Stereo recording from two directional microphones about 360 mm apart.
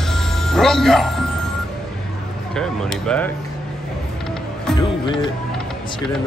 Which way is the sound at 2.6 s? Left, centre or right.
Centre.